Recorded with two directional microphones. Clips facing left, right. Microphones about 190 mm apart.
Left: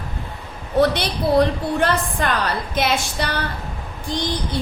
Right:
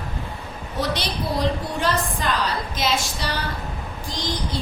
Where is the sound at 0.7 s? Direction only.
60° left (ahead or behind).